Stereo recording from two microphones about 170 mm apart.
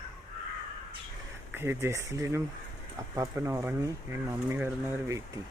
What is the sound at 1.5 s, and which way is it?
Speech, 15° right (ahead or behind).